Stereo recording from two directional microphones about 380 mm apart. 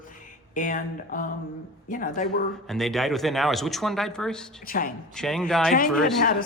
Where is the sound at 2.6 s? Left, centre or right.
Centre.